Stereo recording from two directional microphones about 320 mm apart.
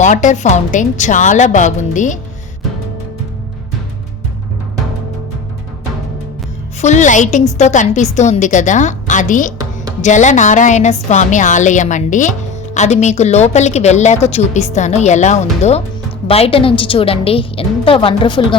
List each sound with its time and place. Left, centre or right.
0.0 s a woman's voice: left
6.8 s a woman's voice: left